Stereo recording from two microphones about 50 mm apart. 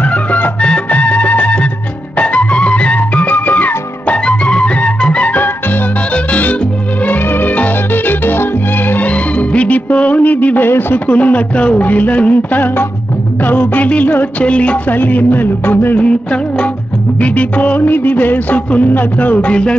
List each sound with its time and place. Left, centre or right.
0.0 s music: left
4.1 s music: left
7.1 s music: left
9.0 s music: left
14.9 s music: left
16.0 s music: left